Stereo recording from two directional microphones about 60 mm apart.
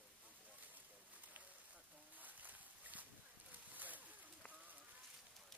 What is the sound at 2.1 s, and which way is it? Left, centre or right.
Boat, right.